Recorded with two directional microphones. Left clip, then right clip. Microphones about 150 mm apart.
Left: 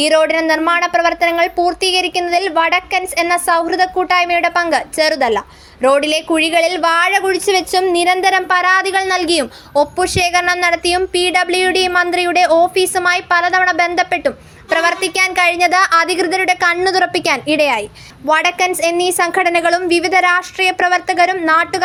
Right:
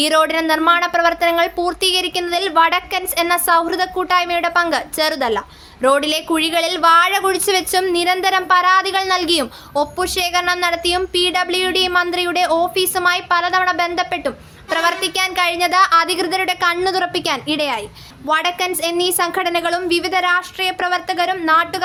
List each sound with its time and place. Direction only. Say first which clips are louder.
0.0 s a woman's voice: left 3 dB; 10° left (ahead or behind); by 21.8 s 25° left (ahead or behind)